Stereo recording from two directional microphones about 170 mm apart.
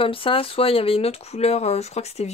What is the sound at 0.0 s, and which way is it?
Speech, 30° left (ahead or behind).